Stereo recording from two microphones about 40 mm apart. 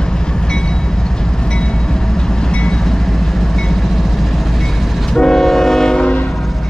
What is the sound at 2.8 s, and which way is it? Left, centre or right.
Vehicle, centre.